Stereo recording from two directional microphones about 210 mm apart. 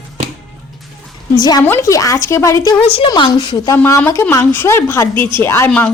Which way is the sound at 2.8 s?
25° left (ahead or behind).